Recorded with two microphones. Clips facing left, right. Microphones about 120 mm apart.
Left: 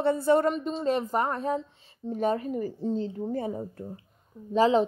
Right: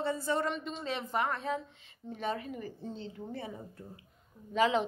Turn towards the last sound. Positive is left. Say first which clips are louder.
# left 6 dB
turn(degrees=35)  # may be behind; listen again after turning